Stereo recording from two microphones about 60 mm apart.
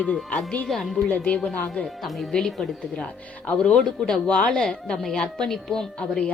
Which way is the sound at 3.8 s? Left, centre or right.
Centre.